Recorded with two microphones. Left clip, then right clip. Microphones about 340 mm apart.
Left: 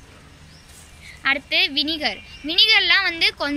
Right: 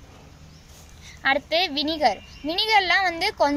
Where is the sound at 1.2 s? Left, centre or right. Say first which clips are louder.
Left 2 dB; right.